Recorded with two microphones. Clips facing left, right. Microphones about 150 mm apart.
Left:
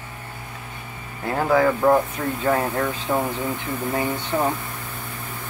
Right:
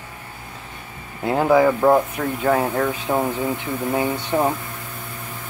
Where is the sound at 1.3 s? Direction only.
15° right (ahead or behind).